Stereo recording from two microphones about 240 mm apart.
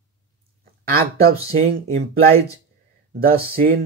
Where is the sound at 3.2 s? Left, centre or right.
Right.